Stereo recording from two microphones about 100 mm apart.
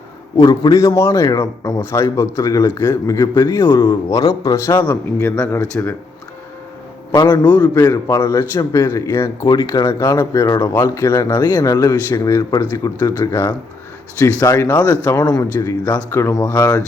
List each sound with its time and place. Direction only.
0.3 s speech: 40° left (ahead or behind)
0.8 s speech: 30° left (ahead or behind)
1.8 s speech: 25° left (ahead or behind)
3.6 s a man's voice: 25° left (ahead or behind)
7.3 s a man's voice: 15° left (ahead or behind)
7.9 s a man's voice: 35° left (ahead or behind)
13.1 s a man's voice: 25° left (ahead or behind)
15.0 s a man's voice: 40° left (ahead or behind)